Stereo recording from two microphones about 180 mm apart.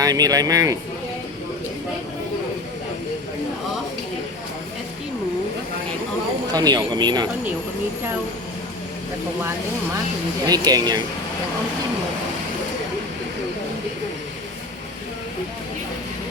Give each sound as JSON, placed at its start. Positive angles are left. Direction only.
{"t": 0.0, "sound": "speech", "side_deg": -20}
{"t": 6.5, "sound": "speech", "side_deg": -20}
{"t": 10.4, "sound": "speech", "side_deg": -20}